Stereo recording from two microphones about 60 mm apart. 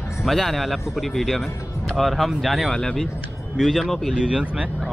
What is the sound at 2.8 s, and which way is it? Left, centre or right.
Speech, centre.